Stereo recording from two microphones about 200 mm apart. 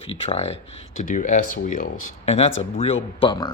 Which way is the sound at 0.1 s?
30° left (ahead or behind).